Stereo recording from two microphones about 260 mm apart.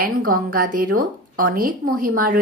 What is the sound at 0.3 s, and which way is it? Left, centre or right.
A woman's voice, right.